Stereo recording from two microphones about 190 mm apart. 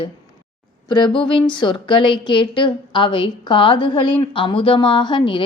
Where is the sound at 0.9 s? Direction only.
25° left (ahead or behind).